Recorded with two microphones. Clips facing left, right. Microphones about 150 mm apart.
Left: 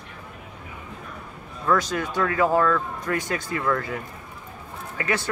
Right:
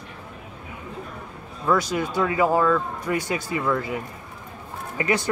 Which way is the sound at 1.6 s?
10° right (ahead or behind).